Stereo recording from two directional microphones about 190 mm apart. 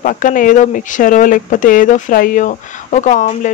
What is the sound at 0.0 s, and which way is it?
Speech, 45° left (ahead or behind).